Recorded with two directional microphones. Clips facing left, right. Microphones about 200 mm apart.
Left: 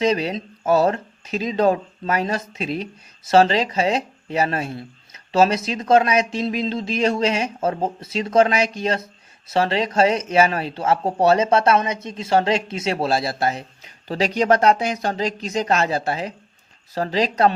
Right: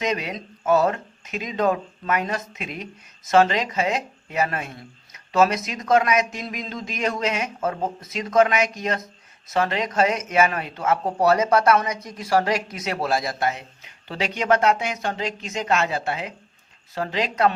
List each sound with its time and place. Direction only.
0.0 s speech: 30° left (ahead or behind)